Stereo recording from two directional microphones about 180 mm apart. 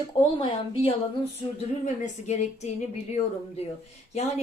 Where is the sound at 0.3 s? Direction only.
30° left (ahead or behind).